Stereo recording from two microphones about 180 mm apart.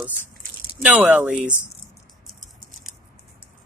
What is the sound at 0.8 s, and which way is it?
Speech, 5° right (ahead or behind).